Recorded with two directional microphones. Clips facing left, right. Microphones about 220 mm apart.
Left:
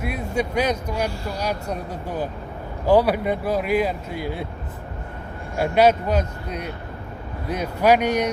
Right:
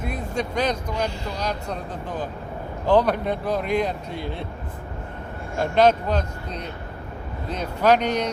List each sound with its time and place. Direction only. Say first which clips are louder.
0.0 s speech: left 2 dB; 10° left (ahead or behind)
5.5 s speech: left 1 dB; 10° left (ahead or behind)